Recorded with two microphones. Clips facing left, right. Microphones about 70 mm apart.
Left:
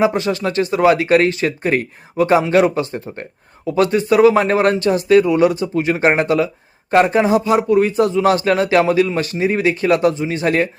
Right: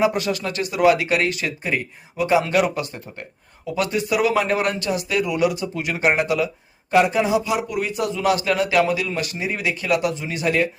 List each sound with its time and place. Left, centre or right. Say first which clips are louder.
0.0 s speech: left 4 dB; left